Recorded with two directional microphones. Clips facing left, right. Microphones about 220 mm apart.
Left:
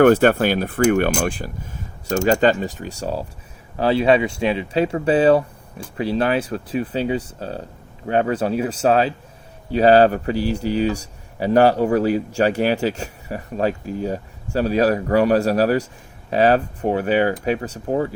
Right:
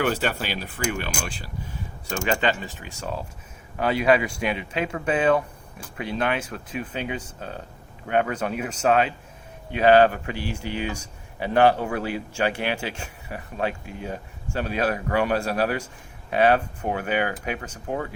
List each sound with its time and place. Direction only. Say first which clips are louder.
0.0 s speech: left 12 dB; 50° left (ahead or behind)
2.0 s speech: left 8 dB; 40° left (ahead or behind)